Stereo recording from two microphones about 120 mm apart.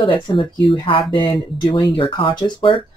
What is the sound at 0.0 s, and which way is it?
Speech, 45° left (ahead or behind).